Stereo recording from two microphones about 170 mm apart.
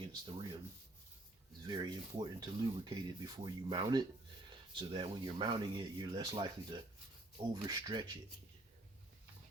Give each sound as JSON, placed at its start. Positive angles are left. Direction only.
{"t": 0.1, "sound": "speech", "side_deg": -25}
{"t": 1.6, "sound": "speech", "side_deg": -25}